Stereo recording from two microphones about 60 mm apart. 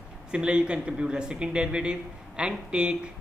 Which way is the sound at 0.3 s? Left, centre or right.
Centre.